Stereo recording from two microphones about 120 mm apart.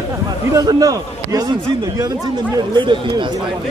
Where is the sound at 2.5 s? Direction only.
40° right (ahead or behind).